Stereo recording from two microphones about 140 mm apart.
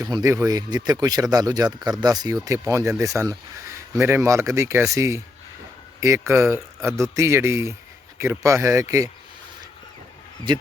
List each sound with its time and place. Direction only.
0.0 s speech: 25° right (ahead or behind)